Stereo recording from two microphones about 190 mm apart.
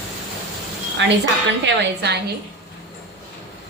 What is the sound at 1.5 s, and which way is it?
Speech, 70° right (ahead or behind).